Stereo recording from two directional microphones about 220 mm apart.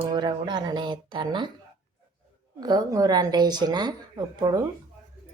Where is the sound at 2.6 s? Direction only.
15° right (ahead or behind).